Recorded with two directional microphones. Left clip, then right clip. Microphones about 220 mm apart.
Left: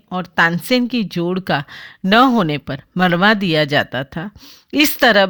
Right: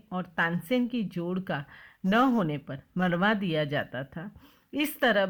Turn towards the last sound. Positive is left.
turn(degrees=40)  # may be behind; listen again after turning